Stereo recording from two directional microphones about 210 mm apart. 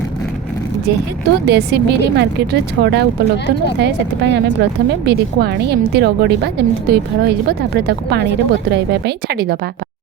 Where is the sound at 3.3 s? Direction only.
55° left (ahead or behind).